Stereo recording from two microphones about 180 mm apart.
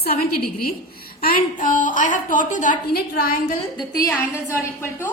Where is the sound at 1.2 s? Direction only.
50° left (ahead or behind).